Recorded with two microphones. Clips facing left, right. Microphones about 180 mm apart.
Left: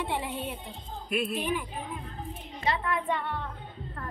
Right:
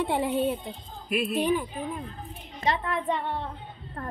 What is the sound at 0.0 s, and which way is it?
Music, 40° right (ahead or behind).